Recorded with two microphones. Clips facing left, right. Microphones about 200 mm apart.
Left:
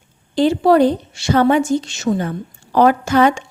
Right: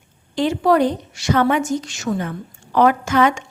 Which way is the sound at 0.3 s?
30° left (ahead or behind).